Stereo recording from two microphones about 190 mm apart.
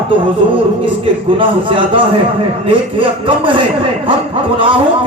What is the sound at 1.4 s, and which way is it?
Speech, 25° right (ahead or behind).